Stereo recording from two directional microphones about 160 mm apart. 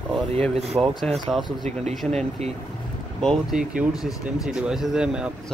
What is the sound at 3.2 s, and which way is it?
Speech, centre (ahead or behind).